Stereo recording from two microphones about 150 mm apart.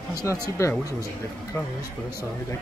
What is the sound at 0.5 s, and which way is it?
Speech, 20° left (ahead or behind).